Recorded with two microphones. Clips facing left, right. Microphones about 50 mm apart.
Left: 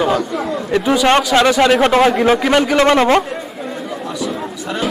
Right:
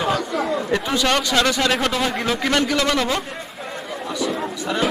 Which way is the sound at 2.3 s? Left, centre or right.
Centre.